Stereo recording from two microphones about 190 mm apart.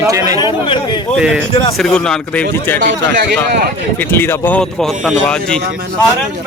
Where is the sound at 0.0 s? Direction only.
15° right (ahead or behind).